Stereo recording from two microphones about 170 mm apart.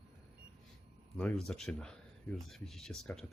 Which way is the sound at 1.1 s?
5° left (ahead or behind).